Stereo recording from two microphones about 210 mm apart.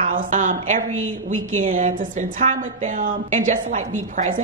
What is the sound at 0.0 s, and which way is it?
A woman's voice, 40° right (ahead or behind).